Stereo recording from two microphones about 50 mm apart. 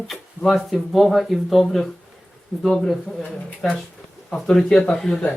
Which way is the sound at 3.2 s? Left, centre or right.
Centre.